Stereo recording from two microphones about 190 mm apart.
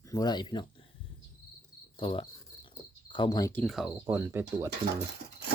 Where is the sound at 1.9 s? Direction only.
25° left (ahead or behind).